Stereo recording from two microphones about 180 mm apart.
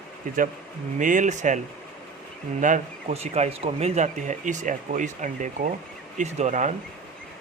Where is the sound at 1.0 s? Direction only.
45° right (ahead or behind).